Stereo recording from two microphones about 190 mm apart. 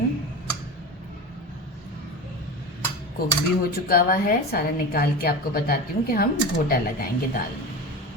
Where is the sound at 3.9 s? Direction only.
50° left (ahead or behind).